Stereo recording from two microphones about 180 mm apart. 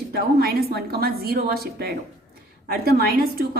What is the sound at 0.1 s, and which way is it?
A woman's voice, 60° right (ahead or behind).